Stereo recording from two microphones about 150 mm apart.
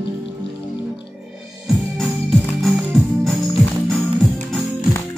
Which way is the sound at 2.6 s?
Centre (ahead or behind).